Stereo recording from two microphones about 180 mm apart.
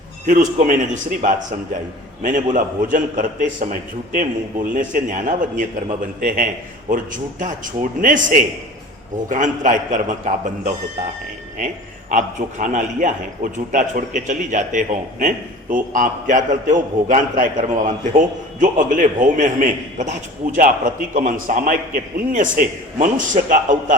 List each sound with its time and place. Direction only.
0.3 s a man's voice: 50° right (ahead or behind)
2.2 s a man's voice: 45° right (ahead or behind)
9.3 s a man's voice: 45° right (ahead or behind)